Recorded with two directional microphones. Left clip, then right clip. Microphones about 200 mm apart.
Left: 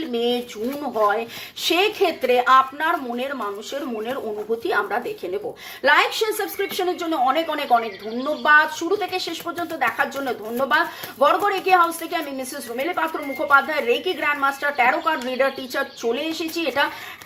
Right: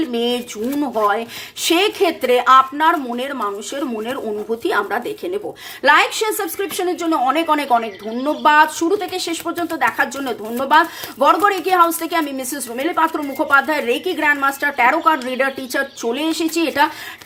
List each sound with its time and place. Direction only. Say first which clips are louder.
0.0 s speech: right 3 dB; 35° right (ahead or behind)
4.6 s speech: right 4 dB; 35° right (ahead or behind)